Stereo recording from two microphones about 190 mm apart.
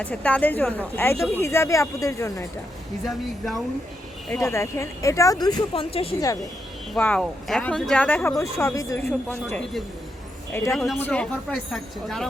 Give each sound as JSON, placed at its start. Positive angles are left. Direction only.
{"t": 0.0, "sound": "speech", "side_deg": 5}
{"t": 3.0, "sound": "speech", "side_deg": 0}
{"t": 4.3, "sound": "speech", "side_deg": 15}
{"t": 6.1, "sound": "speech", "side_deg": 15}
{"t": 6.9, "sound": "speech", "side_deg": 5}